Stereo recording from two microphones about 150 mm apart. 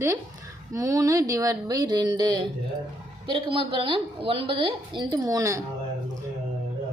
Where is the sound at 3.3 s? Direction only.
35° right (ahead or behind).